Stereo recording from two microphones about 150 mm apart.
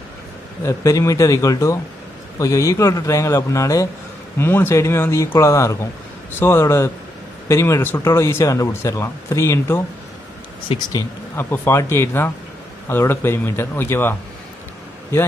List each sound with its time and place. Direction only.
0.7 s speech: 20° left (ahead or behind)
10.9 s speech: 25° left (ahead or behind)